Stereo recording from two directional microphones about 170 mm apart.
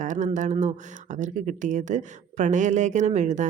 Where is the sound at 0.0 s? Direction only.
50° right (ahead or behind).